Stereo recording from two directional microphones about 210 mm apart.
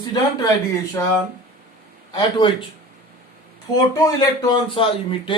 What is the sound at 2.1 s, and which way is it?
Speech, 20° left (ahead or behind).